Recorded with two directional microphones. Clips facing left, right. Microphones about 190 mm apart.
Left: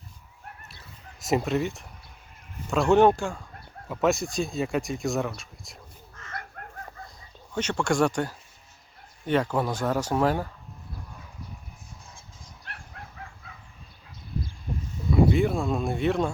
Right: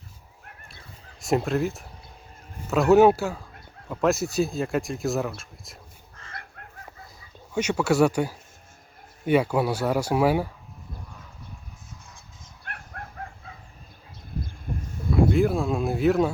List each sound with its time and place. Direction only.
1.2 s speech: centre (ahead or behind)
6.2 s chicken: 35° right (ahead or behind)
6.6 s chicken: 45° left (ahead or behind)
7.5 s speech: 10° right (ahead or behind)
12.6 s dog: 55° right (ahead or behind)
15.1 s a sound: centre (ahead or behind)